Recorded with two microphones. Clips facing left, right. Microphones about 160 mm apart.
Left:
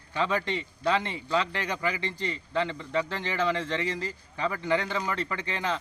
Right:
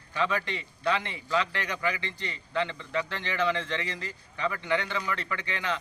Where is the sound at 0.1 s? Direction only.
30° left (ahead or behind).